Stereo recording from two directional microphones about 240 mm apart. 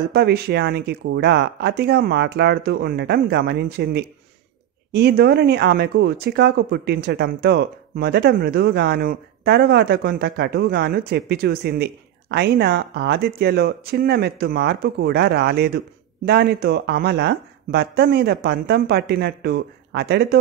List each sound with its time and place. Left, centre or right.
0.1 s speech: right